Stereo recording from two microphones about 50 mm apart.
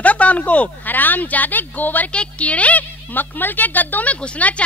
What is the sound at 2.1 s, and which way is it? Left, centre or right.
Speech, left.